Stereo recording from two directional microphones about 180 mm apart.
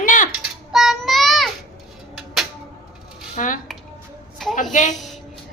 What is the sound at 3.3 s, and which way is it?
Dishes, 45° left (ahead or behind).